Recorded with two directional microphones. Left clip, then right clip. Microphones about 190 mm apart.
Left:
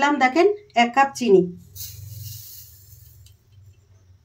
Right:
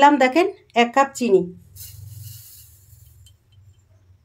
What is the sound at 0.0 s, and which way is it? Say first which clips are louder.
Speech: right 3 dB; 50° right (ahead or behind).